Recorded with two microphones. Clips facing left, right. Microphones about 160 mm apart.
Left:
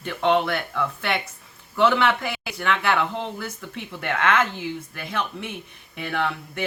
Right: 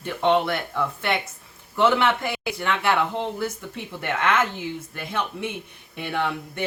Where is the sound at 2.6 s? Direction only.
20° right (ahead or behind).